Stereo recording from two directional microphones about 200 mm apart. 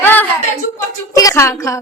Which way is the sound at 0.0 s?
10° left (ahead or behind).